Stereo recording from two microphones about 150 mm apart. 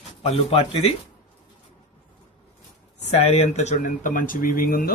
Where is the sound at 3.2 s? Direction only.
45° left (ahead or behind); by 4.9 s 75° left (ahead or behind).